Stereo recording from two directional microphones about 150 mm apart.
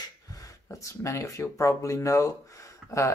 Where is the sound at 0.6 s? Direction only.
20° left (ahead or behind).